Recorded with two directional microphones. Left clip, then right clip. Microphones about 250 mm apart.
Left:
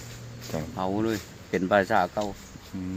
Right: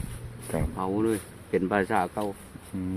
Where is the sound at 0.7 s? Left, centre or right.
Centre.